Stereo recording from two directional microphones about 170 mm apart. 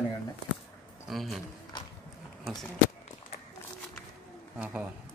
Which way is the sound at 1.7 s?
25° left (ahead or behind).